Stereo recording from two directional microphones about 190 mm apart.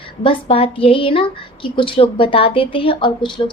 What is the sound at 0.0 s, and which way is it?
A woman's voice, 25° left (ahead or behind).